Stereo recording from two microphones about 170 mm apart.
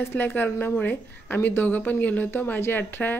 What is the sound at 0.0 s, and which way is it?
Speech, 10° left (ahead or behind).